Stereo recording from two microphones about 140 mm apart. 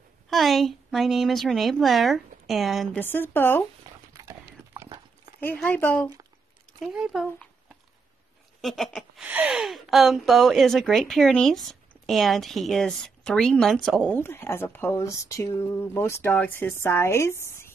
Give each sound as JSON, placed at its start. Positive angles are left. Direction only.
{"t": 0.3, "sound": "speech", "side_deg": 0}
{"t": 3.0, "sound": "a woman's voice", "side_deg": 15}
{"t": 4.1, "sound": "clip-clop", "side_deg": -25}
{"t": 4.8, "sound": "dog", "side_deg": -35}
{"t": 5.5, "sound": "a woman's voice", "side_deg": 15}
{"t": 6.8, "sound": "speech", "side_deg": 0}
{"t": 8.5, "sound": "speech", "side_deg": 0}
{"t": 9.2, "sound": "speech", "side_deg": -10}